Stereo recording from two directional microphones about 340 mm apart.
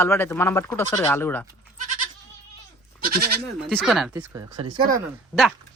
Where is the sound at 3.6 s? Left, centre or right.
Centre.